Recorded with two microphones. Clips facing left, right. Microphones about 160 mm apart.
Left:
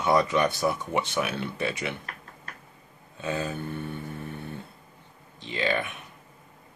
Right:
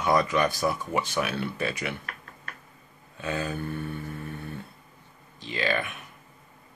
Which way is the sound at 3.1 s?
25° left (ahead or behind).